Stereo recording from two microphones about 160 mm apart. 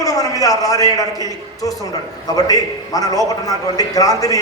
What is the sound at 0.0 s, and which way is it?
A man's voice, 20° left (ahead or behind).